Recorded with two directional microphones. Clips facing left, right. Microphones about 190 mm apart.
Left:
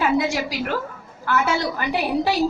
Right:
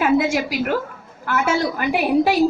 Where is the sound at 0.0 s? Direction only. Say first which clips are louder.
Right 3 dB; 50° right (ahead or behind).